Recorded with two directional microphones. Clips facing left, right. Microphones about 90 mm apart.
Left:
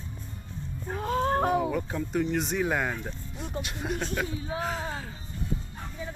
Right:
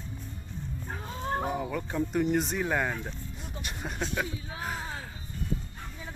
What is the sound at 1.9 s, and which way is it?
Speech, 5° right (ahead or behind).